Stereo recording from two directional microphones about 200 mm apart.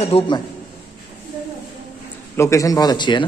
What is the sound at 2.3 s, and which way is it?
Speech, 15° left (ahead or behind).